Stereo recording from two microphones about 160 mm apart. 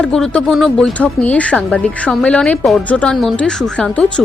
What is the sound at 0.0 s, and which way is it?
A woman's voice, 5° left (ahead or behind).